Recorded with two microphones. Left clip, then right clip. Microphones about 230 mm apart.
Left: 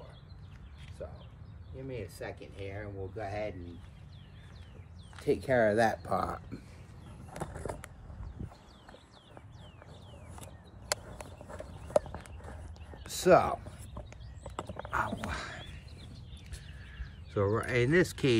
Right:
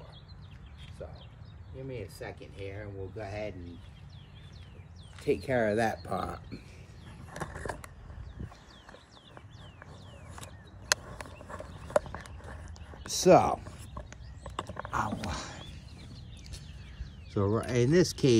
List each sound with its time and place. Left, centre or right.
1.8 s speech: centre
5.1 s speech: centre
7.3 s skateboard: left
13.0 s speech: right
13.9 s horse: left
14.9 s a sound: right
17.3 s speech: centre